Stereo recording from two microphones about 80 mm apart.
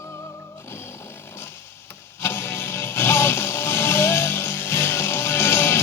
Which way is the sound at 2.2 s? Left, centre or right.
Left.